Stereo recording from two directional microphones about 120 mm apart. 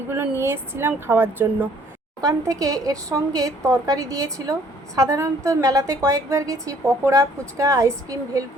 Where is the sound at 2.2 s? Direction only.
30° right (ahead or behind).